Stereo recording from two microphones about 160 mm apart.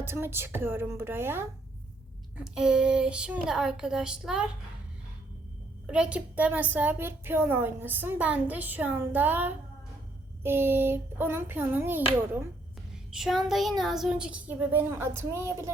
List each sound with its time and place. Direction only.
0.0 s a woman's voice: 15° right (ahead or behind)
5.8 s a woman's voice: 5° right (ahead or behind)
13.1 s speech: centre (ahead or behind)